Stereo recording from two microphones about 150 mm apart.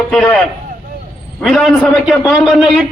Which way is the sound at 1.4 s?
Centre (ahead or behind).